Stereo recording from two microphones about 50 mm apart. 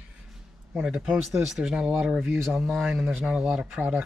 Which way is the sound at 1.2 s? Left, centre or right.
Centre.